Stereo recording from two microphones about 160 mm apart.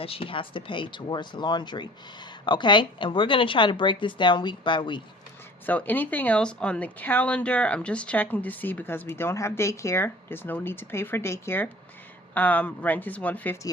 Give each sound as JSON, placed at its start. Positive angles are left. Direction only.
{"t": 0.0, "sound": "a woman's voice", "side_deg": 35}
{"t": 5.6, "sound": "speech", "side_deg": 10}